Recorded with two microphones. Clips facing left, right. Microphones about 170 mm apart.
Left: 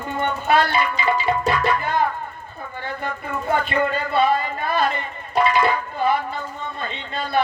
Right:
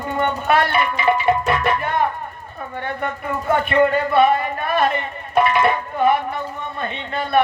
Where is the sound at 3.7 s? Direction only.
60° right (ahead or behind).